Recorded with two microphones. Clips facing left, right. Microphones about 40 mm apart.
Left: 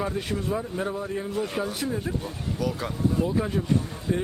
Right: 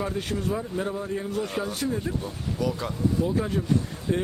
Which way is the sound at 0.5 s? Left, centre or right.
Centre.